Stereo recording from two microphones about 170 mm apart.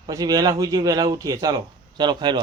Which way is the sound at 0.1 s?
20° right (ahead or behind).